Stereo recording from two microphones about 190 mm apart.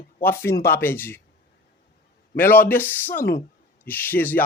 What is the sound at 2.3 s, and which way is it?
A man's voice, 10° left (ahead or behind).